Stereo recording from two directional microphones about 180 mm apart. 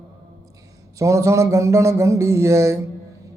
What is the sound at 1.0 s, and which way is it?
Mantra, 15° right (ahead or behind).